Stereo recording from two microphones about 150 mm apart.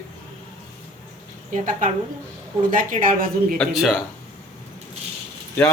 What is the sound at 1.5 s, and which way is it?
Speech, 60° right (ahead or behind).